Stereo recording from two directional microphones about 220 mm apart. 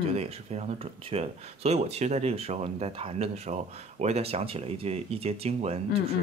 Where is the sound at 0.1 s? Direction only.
30° right (ahead or behind).